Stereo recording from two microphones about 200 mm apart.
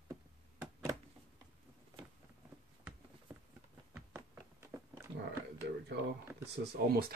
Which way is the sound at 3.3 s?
10° right (ahead or behind).